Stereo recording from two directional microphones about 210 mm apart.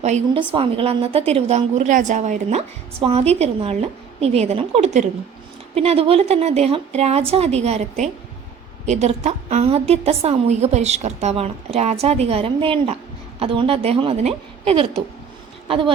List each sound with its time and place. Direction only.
0.0 s a woman's voice: 30° right (ahead or behind)